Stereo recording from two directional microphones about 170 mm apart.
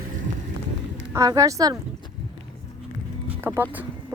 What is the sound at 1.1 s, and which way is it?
Speech, 20° right (ahead or behind).